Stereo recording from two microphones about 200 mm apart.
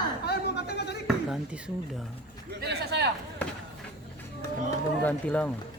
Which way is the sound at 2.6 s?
55° right (ahead or behind).